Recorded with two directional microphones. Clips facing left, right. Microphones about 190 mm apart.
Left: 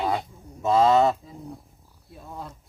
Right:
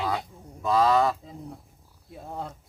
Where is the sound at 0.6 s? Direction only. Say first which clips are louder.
Left 3 dB; 20° left (ahead or behind).